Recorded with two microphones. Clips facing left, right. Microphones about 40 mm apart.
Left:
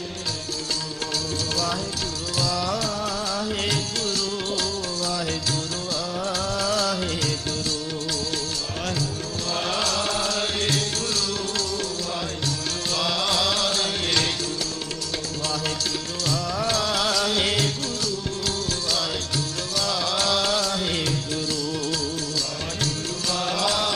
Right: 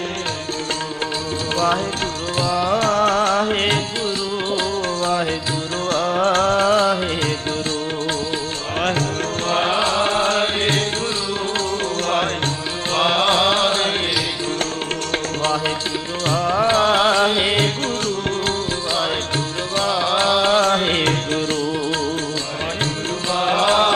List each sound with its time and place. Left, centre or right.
2.3 s music: right
2.8 s music: right
5.9 s music: right
9.5 s mantra: right
12.9 s mantra: right
16.3 s music: right
18.9 s music: right
23.3 s mantra: right